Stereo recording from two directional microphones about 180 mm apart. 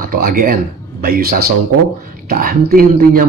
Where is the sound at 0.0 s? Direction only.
55° right (ahead or behind).